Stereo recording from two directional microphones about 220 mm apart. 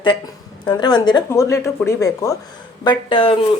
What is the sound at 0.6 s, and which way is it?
A woman's voice, 20° left (ahead or behind).